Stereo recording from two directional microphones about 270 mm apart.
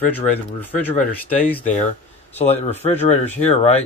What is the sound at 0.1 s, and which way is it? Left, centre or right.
Speech, centre.